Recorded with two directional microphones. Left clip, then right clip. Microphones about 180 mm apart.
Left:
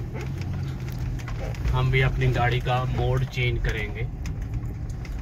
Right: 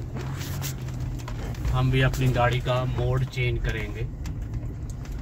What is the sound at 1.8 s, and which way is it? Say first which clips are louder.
Speech: left 1 dB; 50° right (ahead or behind).